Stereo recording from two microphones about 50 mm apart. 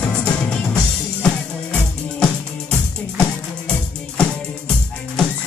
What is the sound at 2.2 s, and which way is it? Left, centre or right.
Music, centre.